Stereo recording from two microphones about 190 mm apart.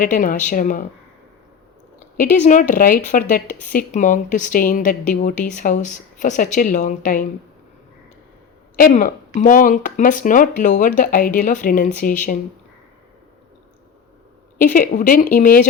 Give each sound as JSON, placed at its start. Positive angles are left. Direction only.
{"t": 0.0, "sound": "speech", "side_deg": 40}
{"t": 2.1, "sound": "speech", "side_deg": 45}
{"t": 8.9, "sound": "speech", "side_deg": 40}
{"t": 14.6, "sound": "speech", "side_deg": 40}